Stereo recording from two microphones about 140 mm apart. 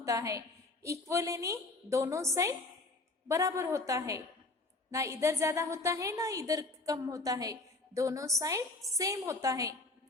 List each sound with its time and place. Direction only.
0.0 s a woman's voice: 25° right (ahead or behind)